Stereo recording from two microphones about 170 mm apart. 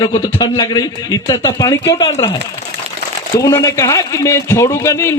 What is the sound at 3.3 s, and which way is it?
A man's voice, 20° left (ahead or behind).